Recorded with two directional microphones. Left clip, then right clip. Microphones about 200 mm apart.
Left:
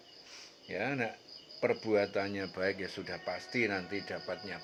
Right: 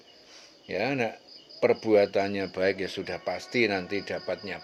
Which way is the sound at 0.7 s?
40° right (ahead or behind).